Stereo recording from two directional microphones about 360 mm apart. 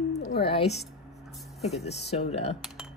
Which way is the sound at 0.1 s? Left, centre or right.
Centre.